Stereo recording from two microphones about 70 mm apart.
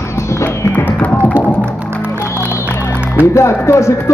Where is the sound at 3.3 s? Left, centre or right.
Left.